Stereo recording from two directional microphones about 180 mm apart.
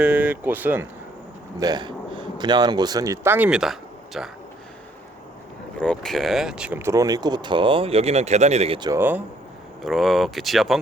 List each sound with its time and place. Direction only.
0.0 s speech: 10° right (ahead or behind)
1.5 s speech: 20° right (ahead or behind); by 4.3 s centre (ahead or behind)
5.7 s speech: 5° left (ahead or behind); by 8.9 s 30° right (ahead or behind)
8.9 s speech: 10° right (ahead or behind)
9.8 s speech: centre (ahead or behind)